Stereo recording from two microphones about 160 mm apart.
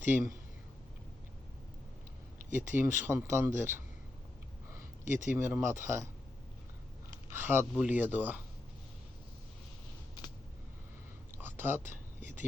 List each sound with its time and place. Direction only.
0.0 s speech: 15° right (ahead or behind)
2.5 s speech: 15° right (ahead or behind)
5.3 s speech: 15° right (ahead or behind)
7.3 s speech: 15° right (ahead or behind)
10.2 s a sound: 25° left (ahead or behind)
11.3 s a sound: 15° right (ahead or behind)